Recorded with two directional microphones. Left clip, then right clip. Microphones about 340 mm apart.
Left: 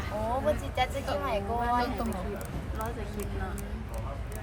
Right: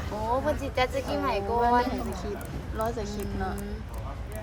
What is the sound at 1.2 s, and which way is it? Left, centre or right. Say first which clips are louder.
Speech: right 7 dB; right.